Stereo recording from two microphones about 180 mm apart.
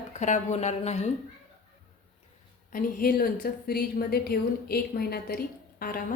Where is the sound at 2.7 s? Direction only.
55° left (ahead or behind).